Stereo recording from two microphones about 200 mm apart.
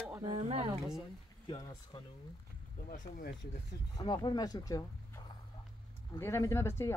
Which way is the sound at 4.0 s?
20° left (ahead or behind).